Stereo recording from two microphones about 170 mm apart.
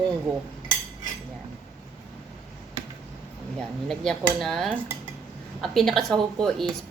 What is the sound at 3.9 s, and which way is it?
A woman's voice, centre (ahead or behind).